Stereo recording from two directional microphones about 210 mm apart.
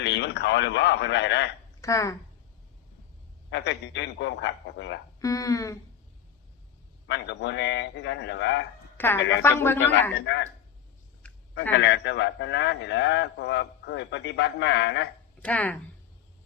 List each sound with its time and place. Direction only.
0.0 s a man's voice: 55° left (ahead or behind)
1.8 s speech: 15° left (ahead or behind)
3.5 s a man's voice: 55° left (ahead or behind)
5.2 s speech: 15° left (ahead or behind)
7.1 s a man's voice: 55° left (ahead or behind)
9.0 s a woman's voice: 10° left (ahead or behind)
10.2 s a man's voice: 55° left (ahead or behind)
11.2 s a sound: 5° left (ahead or behind)
11.8 s a man's voice: 55° left (ahead or behind)
15.4 s speech: 5° left (ahead or behind)